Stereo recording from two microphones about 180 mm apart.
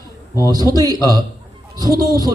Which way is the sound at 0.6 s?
20° right (ahead or behind).